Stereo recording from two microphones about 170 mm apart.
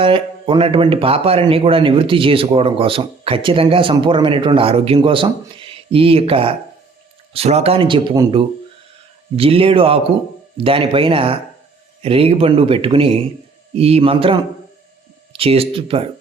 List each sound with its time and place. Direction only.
0.0 s speech: 30° right (ahead or behind)
9.3 s speech: 35° right (ahead or behind)